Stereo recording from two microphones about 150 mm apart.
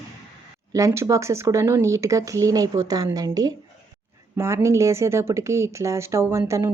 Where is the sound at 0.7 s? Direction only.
20° right (ahead or behind).